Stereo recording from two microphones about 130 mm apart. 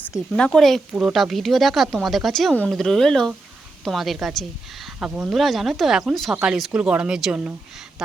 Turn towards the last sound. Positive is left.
turn(degrees=-5)  # may be behind; listen again after turning